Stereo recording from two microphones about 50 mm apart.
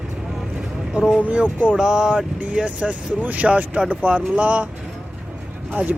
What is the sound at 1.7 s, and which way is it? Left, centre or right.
Speech, centre.